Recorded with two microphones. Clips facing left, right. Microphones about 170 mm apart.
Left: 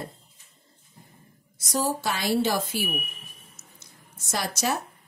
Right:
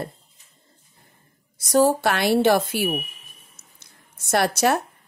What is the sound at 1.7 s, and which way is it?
A woman's voice, 65° right (ahead or behind).